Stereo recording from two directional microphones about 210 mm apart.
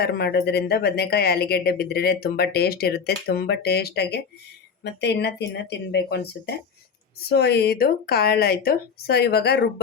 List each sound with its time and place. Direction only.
0.0 s a woman's voice: 50° left (ahead or behind)